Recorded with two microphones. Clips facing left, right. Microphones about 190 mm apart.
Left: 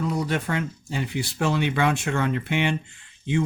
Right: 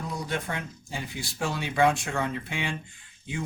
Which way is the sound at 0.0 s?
70° left (ahead or behind).